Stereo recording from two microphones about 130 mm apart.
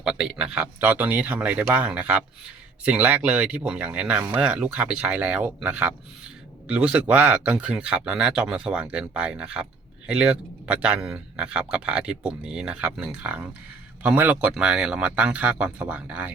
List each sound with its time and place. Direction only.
0.0 s speech: 5° right (ahead or behind)